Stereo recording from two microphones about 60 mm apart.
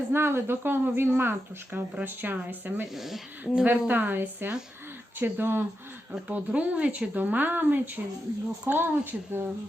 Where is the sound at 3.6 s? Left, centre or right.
Right.